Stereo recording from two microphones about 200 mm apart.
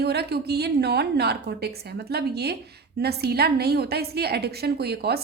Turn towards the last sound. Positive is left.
turn(degrees=-55)  # may be behind; listen again after turning